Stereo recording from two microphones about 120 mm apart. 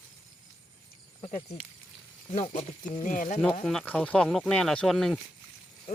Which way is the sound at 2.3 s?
65° left (ahead or behind).